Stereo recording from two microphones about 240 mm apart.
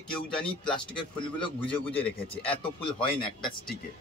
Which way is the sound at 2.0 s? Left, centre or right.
Left.